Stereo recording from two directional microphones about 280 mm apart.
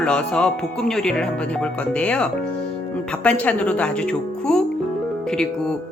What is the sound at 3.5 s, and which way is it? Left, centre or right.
Speech, centre.